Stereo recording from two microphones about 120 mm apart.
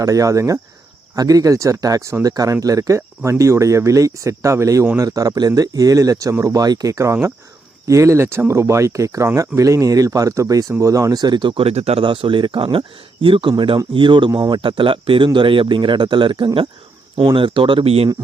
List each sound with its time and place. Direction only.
0.0 s speech: 30° right (ahead or behind); by 18.1 s 55° right (ahead or behind)